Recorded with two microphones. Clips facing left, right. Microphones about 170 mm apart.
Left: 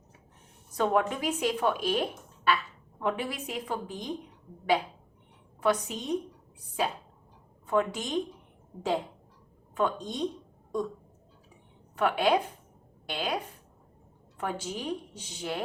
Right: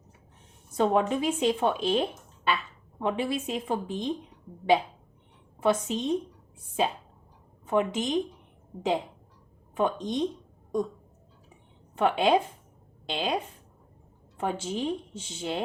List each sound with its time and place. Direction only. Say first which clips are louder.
0.8 s speech: right 3 dB; 25° right (ahead or behind)
5.6 s speech: right 3 dB; 25° right (ahead or behind)
9.7 s speech: right 3 dB; 20° right (ahead or behind)
11.9 s speech: right 2 dB; 25° right (ahead or behind)